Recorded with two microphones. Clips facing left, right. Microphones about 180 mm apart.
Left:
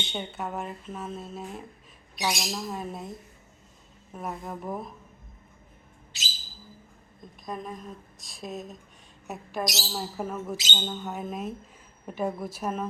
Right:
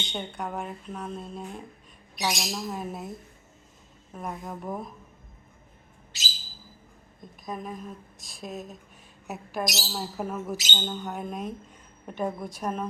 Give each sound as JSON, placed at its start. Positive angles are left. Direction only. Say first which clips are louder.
{"t": 0.1, "sound": "a woman's voice", "louder": "right 1 dB", "side_deg": 5}
{"t": 7.4, "sound": "a woman's voice", "louder": "right 1 dB", "side_deg": 0}